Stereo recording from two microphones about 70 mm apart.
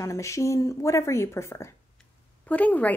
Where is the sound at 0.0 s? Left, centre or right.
Left.